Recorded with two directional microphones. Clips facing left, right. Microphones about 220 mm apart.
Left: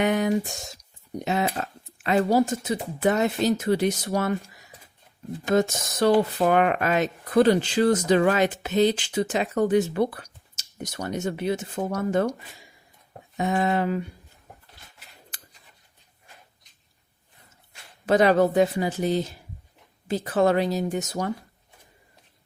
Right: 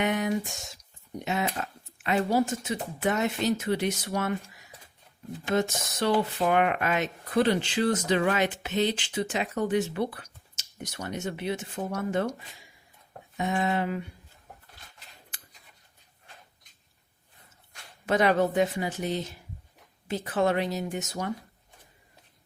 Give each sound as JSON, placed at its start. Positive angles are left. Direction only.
{"t": 0.0, "sound": "speech", "side_deg": 35}
{"t": 5.5, "sound": "speech", "side_deg": 40}
{"t": 13.3, "sound": "speech", "side_deg": 40}
{"t": 18.0, "sound": "speech", "side_deg": 35}